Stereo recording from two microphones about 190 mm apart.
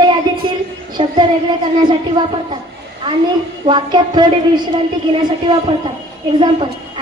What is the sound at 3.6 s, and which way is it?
A woman's voice, 25° right (ahead or behind).